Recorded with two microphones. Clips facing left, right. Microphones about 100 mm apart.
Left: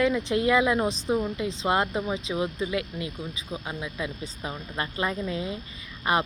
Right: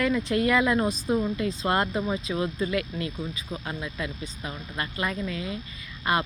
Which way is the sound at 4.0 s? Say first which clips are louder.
Left 1 dB; 25° left (ahead or behind).